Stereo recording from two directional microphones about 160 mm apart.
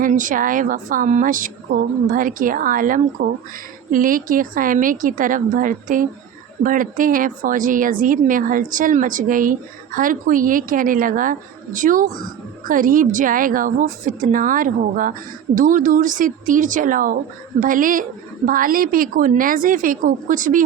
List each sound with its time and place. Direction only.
0.0 s a woman's voice: 55° right (ahead or behind)